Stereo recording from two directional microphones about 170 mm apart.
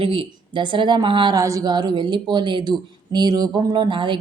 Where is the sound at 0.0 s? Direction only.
30° right (ahead or behind).